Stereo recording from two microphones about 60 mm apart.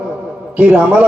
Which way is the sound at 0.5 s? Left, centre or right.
Right.